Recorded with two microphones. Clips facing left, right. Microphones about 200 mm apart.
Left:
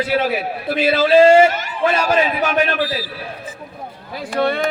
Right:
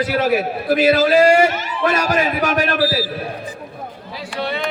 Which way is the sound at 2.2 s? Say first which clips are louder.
Even; 40° right (ahead or behind).